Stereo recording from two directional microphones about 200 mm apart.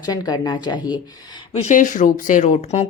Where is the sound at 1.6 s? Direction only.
40° left (ahead or behind).